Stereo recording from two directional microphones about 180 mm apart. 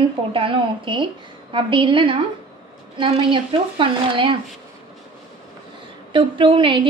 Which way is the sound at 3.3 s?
30° right (ahead or behind).